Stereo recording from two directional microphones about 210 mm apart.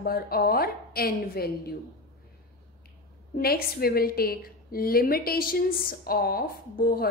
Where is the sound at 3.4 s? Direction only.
45° left (ahead or behind).